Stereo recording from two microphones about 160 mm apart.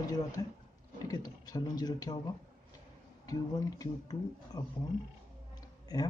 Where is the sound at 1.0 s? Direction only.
25° left (ahead or behind).